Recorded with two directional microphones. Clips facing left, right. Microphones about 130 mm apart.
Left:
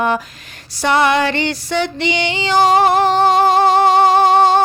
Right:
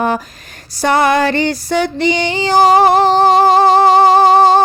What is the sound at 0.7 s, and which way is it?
Female singing, 40° right (ahead or behind).